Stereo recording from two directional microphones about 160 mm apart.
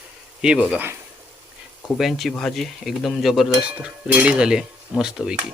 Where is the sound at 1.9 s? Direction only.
Centre (ahead or behind).